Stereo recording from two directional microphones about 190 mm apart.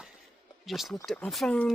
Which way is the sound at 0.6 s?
Centre (ahead or behind).